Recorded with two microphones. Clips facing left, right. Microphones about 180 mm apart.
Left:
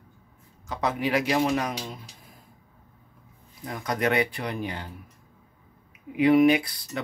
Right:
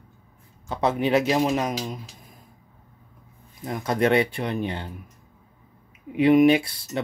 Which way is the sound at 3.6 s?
25° right (ahead or behind).